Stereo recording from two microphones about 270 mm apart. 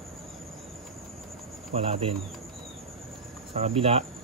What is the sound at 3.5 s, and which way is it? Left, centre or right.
Speech, right.